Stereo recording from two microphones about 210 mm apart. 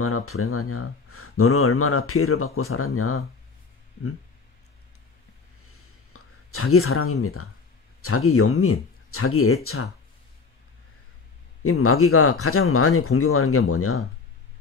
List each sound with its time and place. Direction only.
0.0 s speech: 90° left
6.1 s speech: 90° left
11.6 s speech: 90° left